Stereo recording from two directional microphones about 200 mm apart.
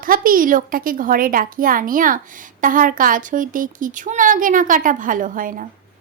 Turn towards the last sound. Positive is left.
turn(degrees=-45)  # may be behind; listen again after turning